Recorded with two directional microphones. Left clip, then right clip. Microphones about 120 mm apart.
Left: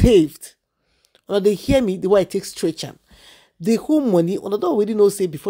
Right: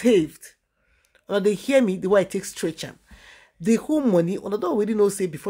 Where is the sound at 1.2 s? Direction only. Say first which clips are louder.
Left 4 dB; 30° left (ahead or behind).